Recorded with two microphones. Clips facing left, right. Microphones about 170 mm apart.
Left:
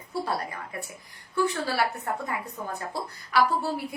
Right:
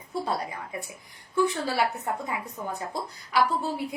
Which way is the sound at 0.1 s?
20° right (ahead or behind).